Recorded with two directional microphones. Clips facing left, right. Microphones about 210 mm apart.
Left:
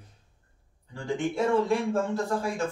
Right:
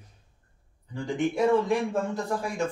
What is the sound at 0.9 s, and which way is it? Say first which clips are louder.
Speech: right 2 dB; 15° right (ahead or behind).